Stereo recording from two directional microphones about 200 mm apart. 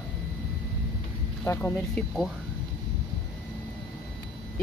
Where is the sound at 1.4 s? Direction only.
10° left (ahead or behind).